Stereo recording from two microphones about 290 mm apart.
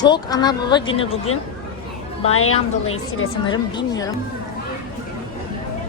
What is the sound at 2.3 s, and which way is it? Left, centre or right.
Speech, left.